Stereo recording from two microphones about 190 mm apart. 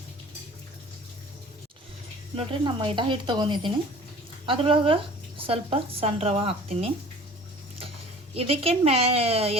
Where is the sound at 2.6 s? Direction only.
25° right (ahead or behind).